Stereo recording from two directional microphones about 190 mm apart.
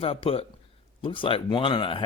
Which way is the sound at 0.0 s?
30° left (ahead or behind).